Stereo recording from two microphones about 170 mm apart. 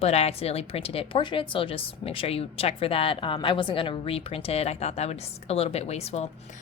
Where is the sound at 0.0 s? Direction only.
35° left (ahead or behind).